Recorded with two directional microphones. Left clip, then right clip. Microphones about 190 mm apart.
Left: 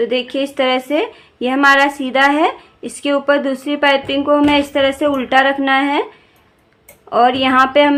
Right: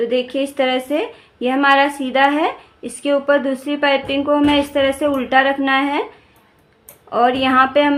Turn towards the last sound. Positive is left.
turn(degrees=25)  # may be behind; listen again after turning